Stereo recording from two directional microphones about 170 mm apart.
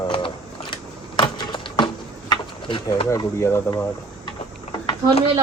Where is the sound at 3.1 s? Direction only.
15° left (ahead or behind).